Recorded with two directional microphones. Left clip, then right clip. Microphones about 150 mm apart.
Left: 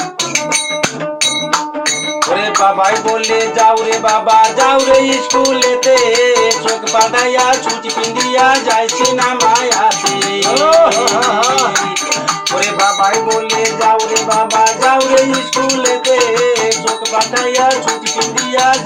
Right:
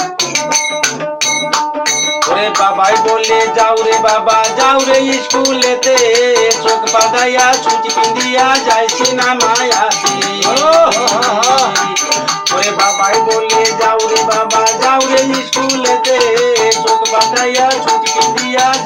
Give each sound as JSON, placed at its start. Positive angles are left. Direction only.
{"t": 4.6, "sound": "music", "side_deg": -15}
{"t": 10.5, "sound": "speech", "side_deg": 10}
{"t": 14.6, "sound": "music", "side_deg": 10}